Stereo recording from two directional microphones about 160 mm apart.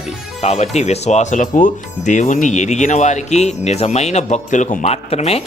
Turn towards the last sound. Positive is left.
turn(degrees=40)  # may be behind; listen again after turning